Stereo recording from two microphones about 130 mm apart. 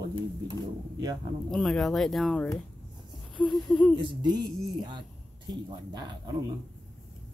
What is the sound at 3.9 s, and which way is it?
Speech, 40° right (ahead or behind).